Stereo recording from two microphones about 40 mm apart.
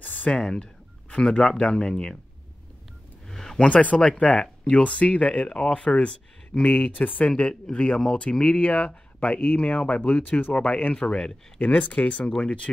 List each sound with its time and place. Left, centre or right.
0.3 s speech: left
3.3 s a sound: centre
3.6 s speech: left
11.6 s speech: left